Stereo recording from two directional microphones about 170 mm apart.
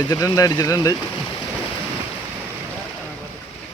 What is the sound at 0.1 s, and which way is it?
Speech, 20° left (ahead or behind).